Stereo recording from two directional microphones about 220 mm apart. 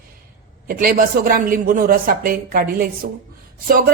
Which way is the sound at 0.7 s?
40° right (ahead or behind).